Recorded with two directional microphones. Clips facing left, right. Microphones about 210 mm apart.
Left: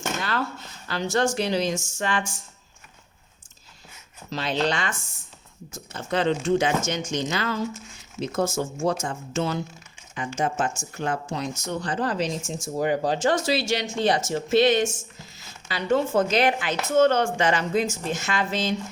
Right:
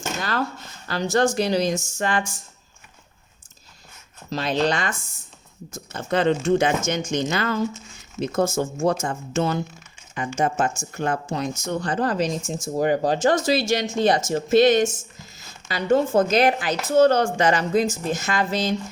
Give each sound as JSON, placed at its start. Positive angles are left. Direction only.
{"t": 0.2, "sound": "speech", "side_deg": -40}
{"t": 4.3, "sound": "speech", "side_deg": -40}
{"t": 5.9, "sound": "speech", "side_deg": -50}